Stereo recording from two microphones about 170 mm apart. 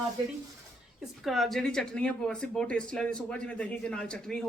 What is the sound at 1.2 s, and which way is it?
Speech, centre (ahead or behind).